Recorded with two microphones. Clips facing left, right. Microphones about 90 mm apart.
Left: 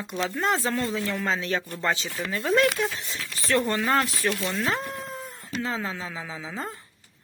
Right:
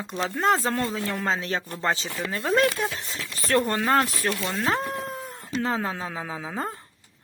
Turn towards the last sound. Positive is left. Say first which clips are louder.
# right 3 dB
turn(degrees=-50)  # may be behind; listen again after turning